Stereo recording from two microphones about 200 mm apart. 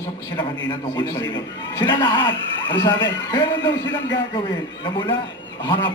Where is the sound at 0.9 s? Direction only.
20° left (ahead or behind).